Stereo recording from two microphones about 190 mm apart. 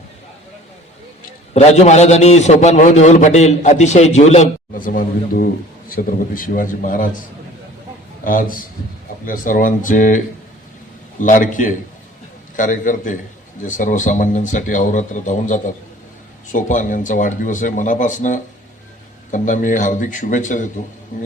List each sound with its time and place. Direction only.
1.5 s a man's voice: 35° left (ahead or behind)
8.2 s speech: 45° left (ahead or behind)
11.2 s a man's voice: 45° left (ahead or behind)